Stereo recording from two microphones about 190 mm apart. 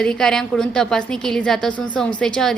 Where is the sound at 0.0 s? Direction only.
5° left (ahead or behind).